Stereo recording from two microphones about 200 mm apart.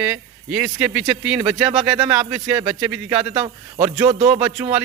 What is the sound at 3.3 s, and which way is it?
Speech, 25° right (ahead or behind).